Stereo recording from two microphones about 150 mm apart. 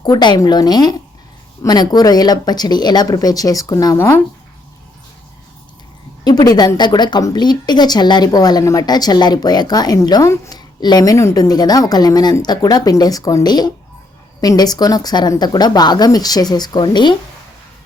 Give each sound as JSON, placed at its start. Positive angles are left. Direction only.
{"t": 0.0, "sound": "a woman's voice", "side_deg": 30}
{"t": 6.2, "sound": "a woman's voice", "side_deg": 25}